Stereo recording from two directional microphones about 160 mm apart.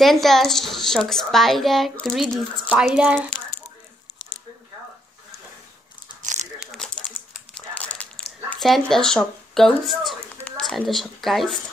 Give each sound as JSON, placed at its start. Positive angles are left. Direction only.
{"t": 0.0, "sound": "a child's voice", "side_deg": 0}
{"t": 6.2, "sound": "crumpling", "side_deg": -45}
{"t": 6.6, "sound": "a sound", "side_deg": 0}
{"t": 8.5, "sound": "speech", "side_deg": 0}